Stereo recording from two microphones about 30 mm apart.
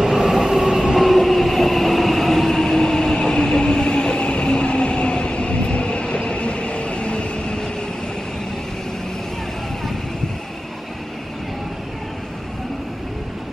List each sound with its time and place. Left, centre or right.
0.1 s train: centre
0.9 s train: centre; by 7.7 s left